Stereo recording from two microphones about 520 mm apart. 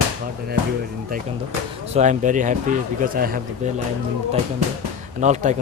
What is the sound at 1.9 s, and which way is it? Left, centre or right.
Speech, centre.